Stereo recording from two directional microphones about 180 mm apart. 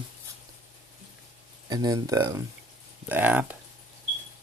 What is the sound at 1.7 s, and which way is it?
Speech, 20° right (ahead or behind).